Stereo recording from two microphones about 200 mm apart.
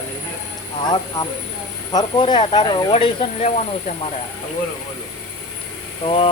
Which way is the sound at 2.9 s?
30° left (ahead or behind).